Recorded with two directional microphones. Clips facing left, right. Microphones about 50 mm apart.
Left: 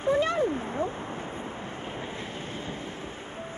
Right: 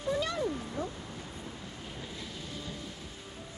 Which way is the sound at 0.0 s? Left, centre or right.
Left.